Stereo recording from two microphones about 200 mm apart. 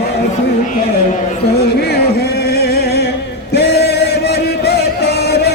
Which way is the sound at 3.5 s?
55° left (ahead or behind).